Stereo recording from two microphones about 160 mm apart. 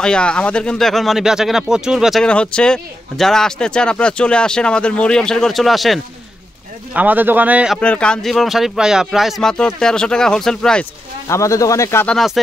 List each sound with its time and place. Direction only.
0.0 s a man's voice: 5° left (ahead or behind)
7.8 s speech: 5° left (ahead or behind)
11.2 s speech: 20° left (ahead or behind)